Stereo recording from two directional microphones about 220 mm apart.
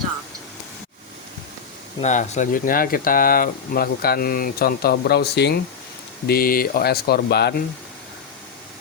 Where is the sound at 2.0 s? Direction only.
30° left (ahead or behind); by 7.5 s 45° left (ahead or behind).